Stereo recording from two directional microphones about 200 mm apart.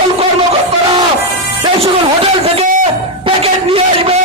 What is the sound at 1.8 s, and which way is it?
Speech, 30° right (ahead or behind).